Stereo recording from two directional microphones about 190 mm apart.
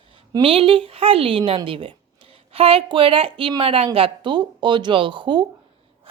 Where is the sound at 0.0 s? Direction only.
30° right (ahead or behind).